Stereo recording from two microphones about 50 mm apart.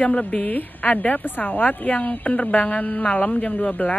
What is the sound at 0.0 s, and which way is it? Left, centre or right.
A woman's voice, left.